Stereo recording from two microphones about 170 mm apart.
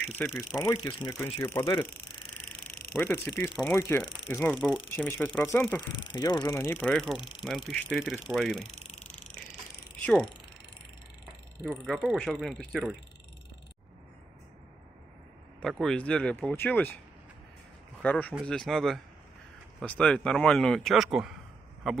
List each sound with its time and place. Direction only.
0.2 s speech: 10° left (ahead or behind)
0.6 s speech: 25° left (ahead or behind)
3.0 s speech: 15° left (ahead or behind)
6.1 s speech: 20° left (ahead or behind)
6.9 s speech: centre (ahead or behind)
11.6 s speech: centre (ahead or behind)
15.6 s speech: 5° left (ahead or behind)
18.0 s speech: 10° left (ahead or behind)